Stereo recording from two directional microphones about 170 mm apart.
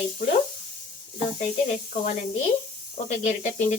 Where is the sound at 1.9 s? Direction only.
50° left (ahead or behind).